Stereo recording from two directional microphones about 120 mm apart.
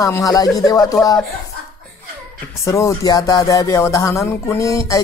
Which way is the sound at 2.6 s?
25° left (ahead or behind).